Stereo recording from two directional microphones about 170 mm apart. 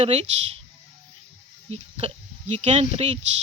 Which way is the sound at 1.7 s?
35° right (ahead or behind).